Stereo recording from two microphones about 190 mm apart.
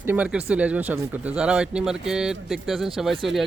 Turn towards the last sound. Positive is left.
turn(degrees=0)  # may be behind; listen again after turning